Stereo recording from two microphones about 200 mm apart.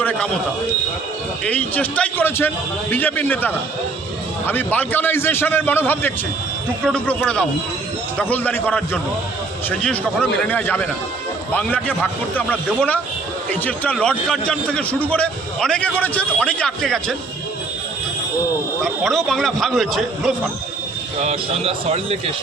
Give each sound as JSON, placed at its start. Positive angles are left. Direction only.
{"t": 0.0, "sound": "a sound", "side_deg": 10}
{"t": 1.5, "sound": "a man's voice", "side_deg": 10}
{"t": 18.8, "sound": "a man's voice", "side_deg": 0}
{"t": 21.2, "sound": "a man's voice", "side_deg": -30}